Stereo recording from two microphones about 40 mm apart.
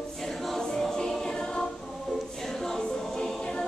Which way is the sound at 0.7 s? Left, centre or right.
Centre.